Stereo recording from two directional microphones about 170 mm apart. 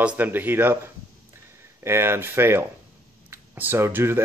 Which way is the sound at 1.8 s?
15° right (ahead or behind).